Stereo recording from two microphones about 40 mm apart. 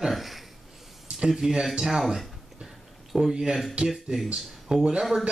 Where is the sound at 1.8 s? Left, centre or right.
Centre.